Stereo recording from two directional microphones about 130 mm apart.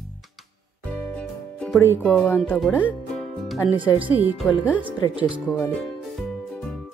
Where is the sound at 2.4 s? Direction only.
5° left (ahead or behind).